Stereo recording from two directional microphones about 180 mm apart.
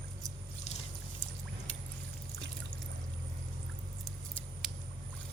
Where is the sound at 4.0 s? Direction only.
Centre (ahead or behind).